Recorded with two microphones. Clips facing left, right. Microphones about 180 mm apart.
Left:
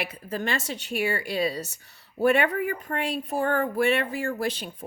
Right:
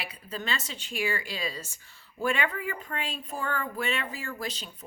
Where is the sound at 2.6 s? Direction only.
45° left (ahead or behind).